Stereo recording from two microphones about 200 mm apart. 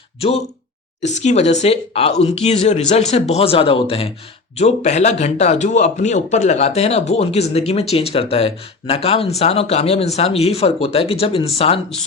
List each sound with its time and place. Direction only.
0.2 s speech: 30° left (ahead or behind)